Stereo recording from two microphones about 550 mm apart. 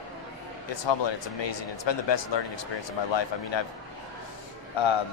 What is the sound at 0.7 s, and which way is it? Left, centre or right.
Speech, left.